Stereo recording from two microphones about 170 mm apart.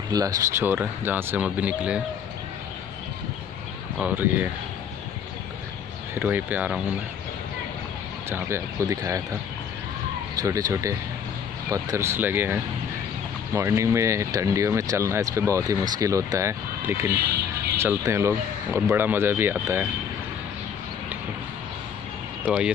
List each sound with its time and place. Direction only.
0.1 s speech: 20° right (ahead or behind)
4.0 s speech: 10° right (ahead or behind)
6.1 s speech: 10° right (ahead or behind)
8.3 s speech: 15° right (ahead or behind)
10.4 s speech: 20° right (ahead or behind)
13.6 s speech: 15° right (ahead or behind)